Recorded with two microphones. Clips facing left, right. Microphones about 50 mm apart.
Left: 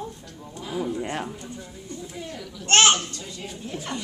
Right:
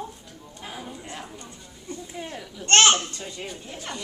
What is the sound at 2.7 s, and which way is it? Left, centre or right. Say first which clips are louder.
Speech: even; centre.